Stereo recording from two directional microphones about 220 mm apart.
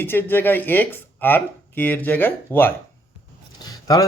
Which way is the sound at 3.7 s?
15° left (ahead or behind).